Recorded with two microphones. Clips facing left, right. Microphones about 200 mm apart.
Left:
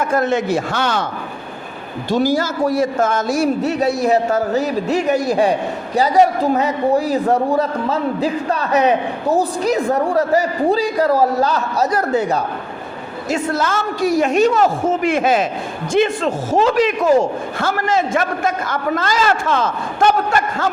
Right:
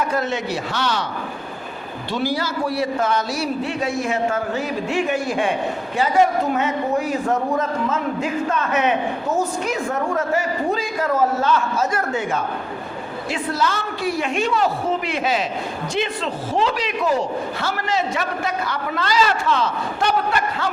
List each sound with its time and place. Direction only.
0.0 s a man's voice: 50° left (ahead or behind)
2.0 s a man's voice: 45° left (ahead or behind)
13.3 s a man's voice: 50° left (ahead or behind)